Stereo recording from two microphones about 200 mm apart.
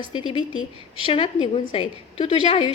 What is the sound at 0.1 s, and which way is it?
A woman's voice, 25° left (ahead or behind).